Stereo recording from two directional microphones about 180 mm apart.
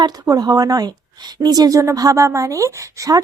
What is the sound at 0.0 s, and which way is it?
Speech, 20° right (ahead or behind).